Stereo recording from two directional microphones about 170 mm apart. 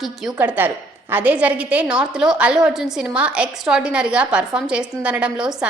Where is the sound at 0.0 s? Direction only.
Centre (ahead or behind).